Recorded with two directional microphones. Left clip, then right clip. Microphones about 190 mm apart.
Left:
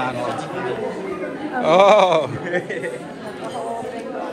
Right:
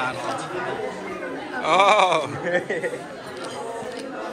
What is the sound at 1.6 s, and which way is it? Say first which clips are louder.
Speech: left 4 dB; 15° right (ahead or behind).